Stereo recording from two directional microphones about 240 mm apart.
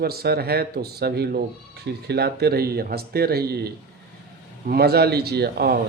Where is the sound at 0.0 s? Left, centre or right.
Right.